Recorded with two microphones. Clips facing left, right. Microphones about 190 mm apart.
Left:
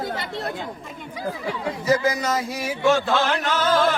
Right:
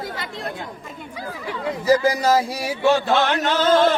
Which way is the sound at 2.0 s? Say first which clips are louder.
Right 5 dB; 30° right (ahead or behind).